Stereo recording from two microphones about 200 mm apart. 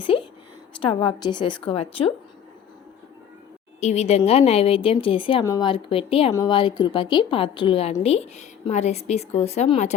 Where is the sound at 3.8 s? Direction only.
35° left (ahead or behind).